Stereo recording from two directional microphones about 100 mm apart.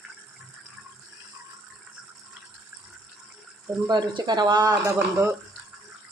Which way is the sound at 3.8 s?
50° right (ahead or behind).